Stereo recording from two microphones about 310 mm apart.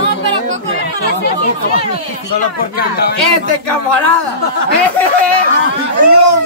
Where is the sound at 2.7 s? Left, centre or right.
Left.